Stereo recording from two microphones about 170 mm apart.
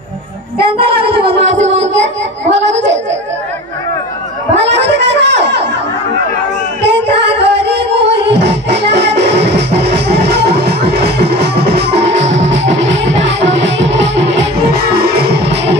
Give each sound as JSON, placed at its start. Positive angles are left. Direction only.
{"t": 0.8, "sound": "speech", "side_deg": -70}
{"t": 1.5, "sound": "a child's voice", "side_deg": -90}
{"t": 4.6, "sound": "a sound", "side_deg": -90}
{"t": 6.8, "sound": "music", "side_deg": -85}
{"t": 12.2, "sound": "music", "side_deg": -90}
{"t": 15.0, "sound": "music", "side_deg": -70}